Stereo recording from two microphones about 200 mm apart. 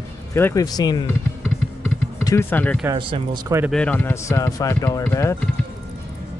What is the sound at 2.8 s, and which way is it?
Speech, 25° right (ahead or behind).